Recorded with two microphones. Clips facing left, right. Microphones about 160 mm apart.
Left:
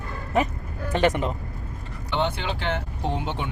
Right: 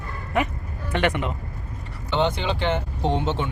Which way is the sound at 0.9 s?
35° left (ahead or behind).